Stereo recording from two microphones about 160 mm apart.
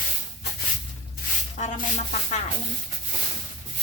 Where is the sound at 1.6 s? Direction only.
50° left (ahead or behind).